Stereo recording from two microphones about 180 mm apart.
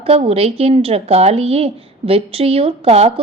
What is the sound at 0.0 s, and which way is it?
A woman's voice, 35° right (ahead or behind).